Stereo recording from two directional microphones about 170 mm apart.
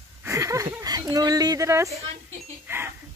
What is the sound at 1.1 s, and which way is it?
Speech, 20° right (ahead or behind).